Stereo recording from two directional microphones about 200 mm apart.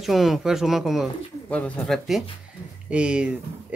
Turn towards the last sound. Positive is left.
turn(degrees=-5)  # may be behind; listen again after turning